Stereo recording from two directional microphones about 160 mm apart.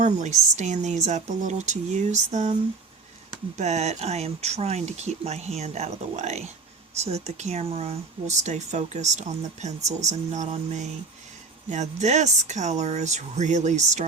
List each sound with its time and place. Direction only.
0.0 s speech: 45° right (ahead or behind)
3.6 s speech: 45° right (ahead or behind)